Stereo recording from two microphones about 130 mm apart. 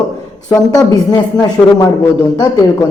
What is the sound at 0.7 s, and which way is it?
Speech, 30° left (ahead or behind).